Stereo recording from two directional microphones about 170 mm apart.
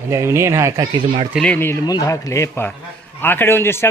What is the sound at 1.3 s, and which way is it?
A man's voice, 5° left (ahead or behind).